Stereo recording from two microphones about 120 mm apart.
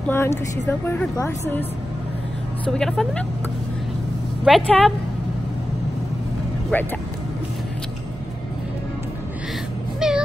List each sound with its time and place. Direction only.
0.1 s speech: 20° left (ahead or behind)
2.6 s speech: 5° left (ahead or behind)
4.5 s speech: 5° left (ahead or behind)
6.7 s speech: 15° left (ahead or behind)
9.9 s music: 5° right (ahead or behind)